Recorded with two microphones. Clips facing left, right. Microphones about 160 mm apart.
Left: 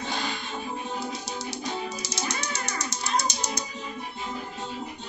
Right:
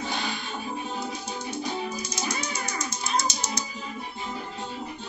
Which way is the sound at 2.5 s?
80° left.